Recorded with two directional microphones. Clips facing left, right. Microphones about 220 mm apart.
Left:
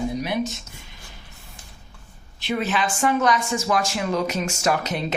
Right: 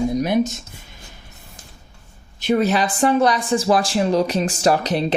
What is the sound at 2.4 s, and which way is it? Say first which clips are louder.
Speech: right 6 dB; 45° right (ahead or behind).